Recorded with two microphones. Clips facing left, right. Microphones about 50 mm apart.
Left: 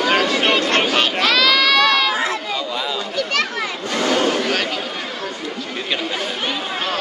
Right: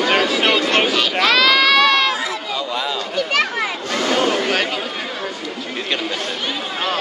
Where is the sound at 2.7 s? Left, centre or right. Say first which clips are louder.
Right 1 dB; centre.